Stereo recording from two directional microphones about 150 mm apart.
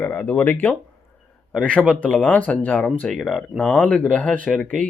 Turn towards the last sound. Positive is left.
turn(degrees=10)  # may be behind; listen again after turning